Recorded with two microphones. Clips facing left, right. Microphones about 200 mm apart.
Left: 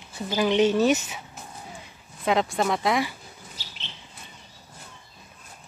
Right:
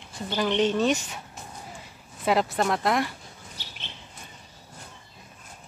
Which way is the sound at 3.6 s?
60° right (ahead or behind).